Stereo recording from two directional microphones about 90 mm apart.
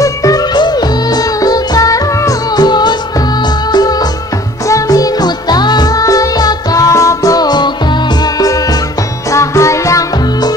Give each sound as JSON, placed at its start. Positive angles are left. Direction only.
{"t": 0.0, "sound": "music", "side_deg": 40}